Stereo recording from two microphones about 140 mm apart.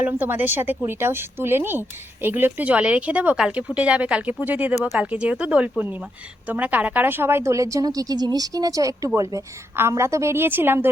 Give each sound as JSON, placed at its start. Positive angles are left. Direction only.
{"t": 0.0, "sound": "speech", "side_deg": -15}